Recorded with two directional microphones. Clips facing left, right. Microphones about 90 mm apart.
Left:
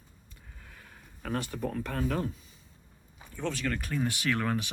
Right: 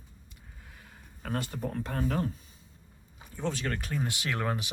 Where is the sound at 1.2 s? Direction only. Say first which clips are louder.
Left 1 dB; 30° right (ahead or behind).